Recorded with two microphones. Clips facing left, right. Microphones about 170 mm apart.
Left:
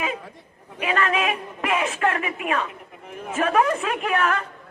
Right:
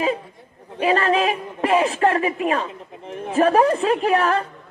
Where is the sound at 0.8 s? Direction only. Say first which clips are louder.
Right 5 dB; 35° right (ahead or behind).